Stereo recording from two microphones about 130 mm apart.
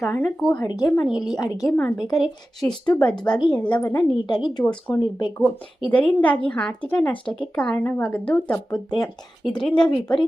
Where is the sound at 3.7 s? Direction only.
15° left (ahead or behind).